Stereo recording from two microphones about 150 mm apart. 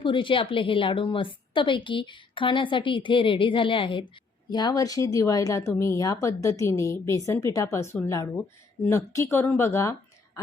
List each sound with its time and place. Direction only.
0.0 s a woman's voice: 35° left (ahead or behind); by 9.9 s 20° left (ahead or behind)